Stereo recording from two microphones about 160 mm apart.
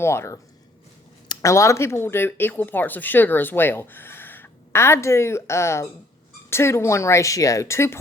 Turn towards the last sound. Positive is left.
turn(degrees=15)  # may be behind; listen again after turning